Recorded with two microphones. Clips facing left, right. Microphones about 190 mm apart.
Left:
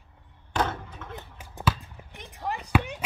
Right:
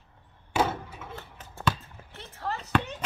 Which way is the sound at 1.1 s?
15° left (ahead or behind).